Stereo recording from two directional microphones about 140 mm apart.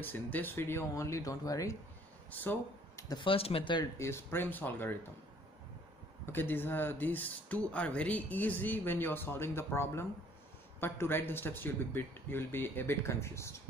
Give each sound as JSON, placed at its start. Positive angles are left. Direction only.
{"t": 0.0, "sound": "speech", "side_deg": 15}
{"t": 2.3, "sound": "speech", "side_deg": 15}
{"t": 3.1, "sound": "speech", "side_deg": 35}
{"t": 4.0, "sound": "speech", "side_deg": 15}
{"t": 6.3, "sound": "speech", "side_deg": 15}